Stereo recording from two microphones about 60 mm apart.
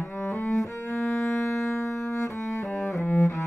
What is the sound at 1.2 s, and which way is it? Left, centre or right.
Music, left.